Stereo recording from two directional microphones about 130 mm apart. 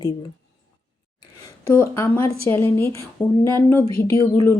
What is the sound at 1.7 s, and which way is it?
A woman's voice, 20° left (ahead or behind).